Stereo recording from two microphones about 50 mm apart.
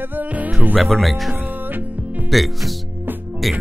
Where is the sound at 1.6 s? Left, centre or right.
Right.